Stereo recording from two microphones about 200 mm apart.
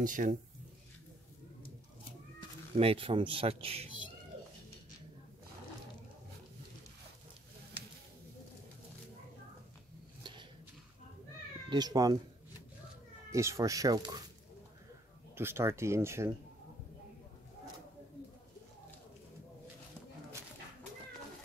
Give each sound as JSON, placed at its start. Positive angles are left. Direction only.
{"t": 0.0, "sound": "speech", "side_deg": -40}
{"t": 2.7, "sound": "speech", "side_deg": -30}
{"t": 11.7, "sound": "speech", "side_deg": -20}
{"t": 13.3, "sound": "speech", "side_deg": -15}
{"t": 15.3, "sound": "speech", "side_deg": -10}